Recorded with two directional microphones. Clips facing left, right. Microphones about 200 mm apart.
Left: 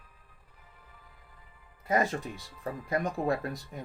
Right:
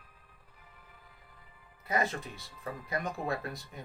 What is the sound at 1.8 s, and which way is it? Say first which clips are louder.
Speech: left 4 dB; 45° left (ahead or behind).